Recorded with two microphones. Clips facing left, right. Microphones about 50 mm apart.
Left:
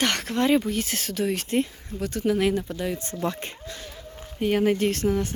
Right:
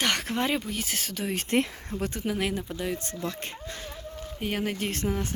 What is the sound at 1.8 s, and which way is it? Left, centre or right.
Speech, right.